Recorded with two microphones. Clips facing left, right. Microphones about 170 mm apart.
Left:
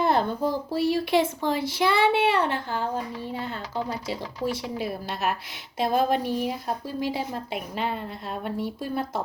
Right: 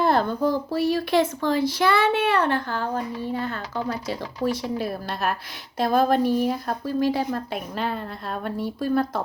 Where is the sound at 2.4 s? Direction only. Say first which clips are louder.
Right 3 dB; 55° right (ahead or behind).